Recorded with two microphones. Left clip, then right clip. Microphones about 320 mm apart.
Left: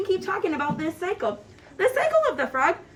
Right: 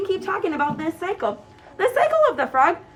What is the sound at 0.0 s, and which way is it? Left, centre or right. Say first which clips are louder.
A woman's voice: right 2 dB; centre.